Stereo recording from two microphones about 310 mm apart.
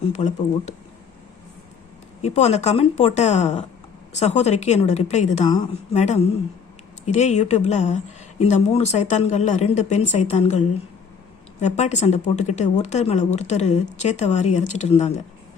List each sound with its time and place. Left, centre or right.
0.0 s speech: left
2.2 s speech: left